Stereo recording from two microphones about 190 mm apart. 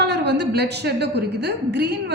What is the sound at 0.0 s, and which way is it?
A woman's voice, 60° right (ahead or behind).